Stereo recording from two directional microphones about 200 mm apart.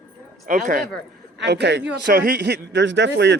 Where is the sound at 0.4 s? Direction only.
40° right (ahead or behind).